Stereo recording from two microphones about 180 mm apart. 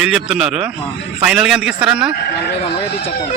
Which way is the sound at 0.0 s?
5° right (ahead or behind).